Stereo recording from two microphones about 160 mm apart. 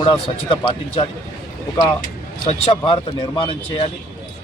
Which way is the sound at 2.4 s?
35° left (ahead or behind).